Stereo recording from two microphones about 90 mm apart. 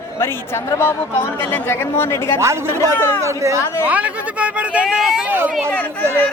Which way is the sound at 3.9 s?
15° right (ahead or behind).